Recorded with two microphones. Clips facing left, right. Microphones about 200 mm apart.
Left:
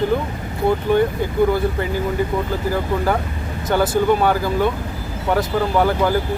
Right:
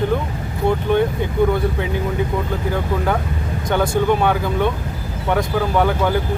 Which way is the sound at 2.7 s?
5° left (ahead or behind).